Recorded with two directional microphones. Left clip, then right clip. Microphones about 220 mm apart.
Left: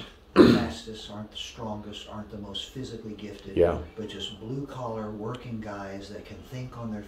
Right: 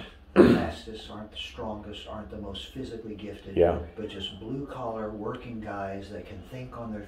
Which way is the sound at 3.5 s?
15° left (ahead or behind).